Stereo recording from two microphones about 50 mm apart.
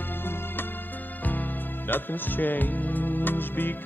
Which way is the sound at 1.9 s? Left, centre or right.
Left.